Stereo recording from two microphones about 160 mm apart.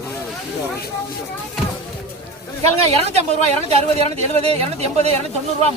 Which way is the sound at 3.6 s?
40° right (ahead or behind).